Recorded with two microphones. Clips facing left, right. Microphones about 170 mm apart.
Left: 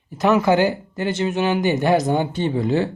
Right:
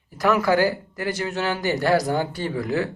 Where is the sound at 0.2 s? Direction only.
20° left (ahead or behind).